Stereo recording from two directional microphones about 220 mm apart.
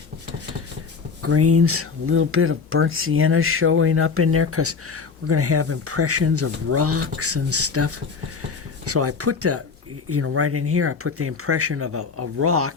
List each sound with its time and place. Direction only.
1.2 s speech: 90° right